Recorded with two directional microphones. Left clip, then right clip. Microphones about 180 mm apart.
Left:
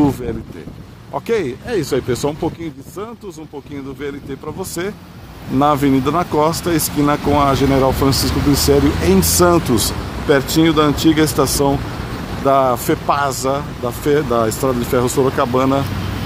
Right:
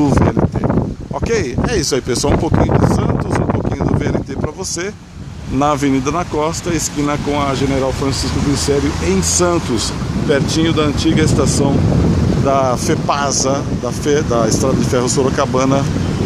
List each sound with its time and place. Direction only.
1.7 s speech: 15° right (ahead or behind)
5.6 s speech: centre (ahead or behind)
12.4 s speech: centre (ahead or behind)